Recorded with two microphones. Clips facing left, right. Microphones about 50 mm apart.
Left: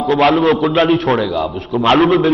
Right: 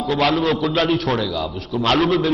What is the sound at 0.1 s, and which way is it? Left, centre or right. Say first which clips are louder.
A man's voice: left 6 dB; left.